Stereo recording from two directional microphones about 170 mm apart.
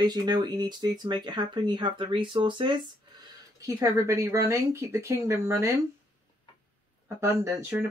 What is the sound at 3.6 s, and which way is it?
Speech, 15° right (ahead or behind).